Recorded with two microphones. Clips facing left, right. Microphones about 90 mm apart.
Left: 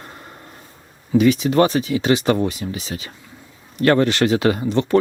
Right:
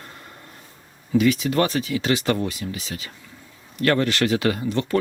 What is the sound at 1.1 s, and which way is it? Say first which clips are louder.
Speech: left 4 dB; 20° left (ahead or behind).